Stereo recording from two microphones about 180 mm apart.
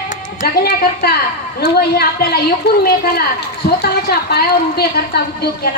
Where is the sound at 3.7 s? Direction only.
60° left (ahead or behind).